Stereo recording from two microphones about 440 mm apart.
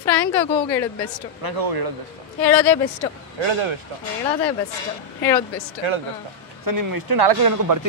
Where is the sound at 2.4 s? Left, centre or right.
Centre.